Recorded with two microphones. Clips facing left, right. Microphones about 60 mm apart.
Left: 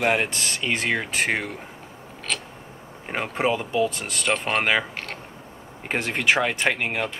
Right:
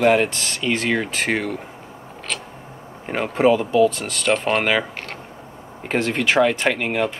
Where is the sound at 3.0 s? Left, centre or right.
Centre.